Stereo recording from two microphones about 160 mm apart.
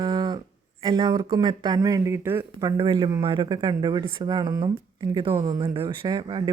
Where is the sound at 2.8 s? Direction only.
30° right (ahead or behind).